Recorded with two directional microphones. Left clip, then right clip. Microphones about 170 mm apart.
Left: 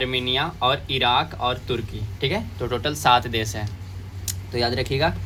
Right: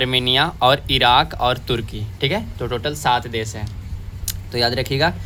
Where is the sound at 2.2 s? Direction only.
20° right (ahead or behind).